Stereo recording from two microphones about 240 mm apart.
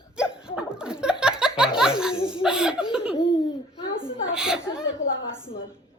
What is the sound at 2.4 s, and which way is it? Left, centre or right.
Chuckle, centre.